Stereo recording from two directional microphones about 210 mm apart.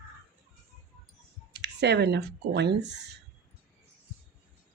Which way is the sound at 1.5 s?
55° right (ahead or behind).